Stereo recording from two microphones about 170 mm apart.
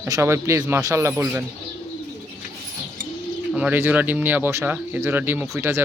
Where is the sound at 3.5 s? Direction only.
5° right (ahead or behind).